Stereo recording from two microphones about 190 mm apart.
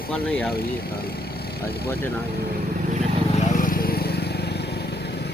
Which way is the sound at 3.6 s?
50° left (ahead or behind).